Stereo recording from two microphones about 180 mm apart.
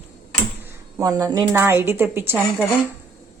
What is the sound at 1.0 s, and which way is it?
A woman's voice, 20° right (ahead or behind).